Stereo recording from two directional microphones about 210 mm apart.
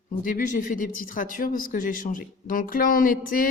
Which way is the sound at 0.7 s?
40° left (ahead or behind).